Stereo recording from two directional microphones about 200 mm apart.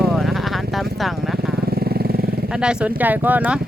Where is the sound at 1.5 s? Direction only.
50° right (ahead or behind).